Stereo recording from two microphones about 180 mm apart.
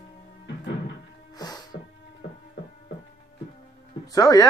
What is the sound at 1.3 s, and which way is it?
Music, 20° left (ahead or behind).